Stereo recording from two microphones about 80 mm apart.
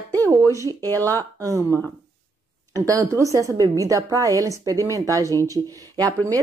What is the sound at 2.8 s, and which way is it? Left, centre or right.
A woman's voice, right.